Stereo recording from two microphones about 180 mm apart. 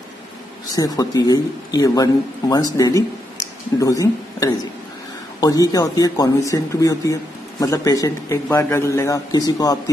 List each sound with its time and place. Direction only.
0.7 s a man's voice: 20° left (ahead or behind)